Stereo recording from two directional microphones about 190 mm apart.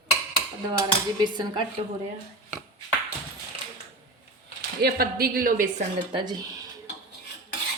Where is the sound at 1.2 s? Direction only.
25° right (ahead or behind).